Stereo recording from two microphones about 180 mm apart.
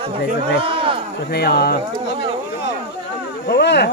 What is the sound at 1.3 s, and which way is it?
Speech, 60° left (ahead or behind).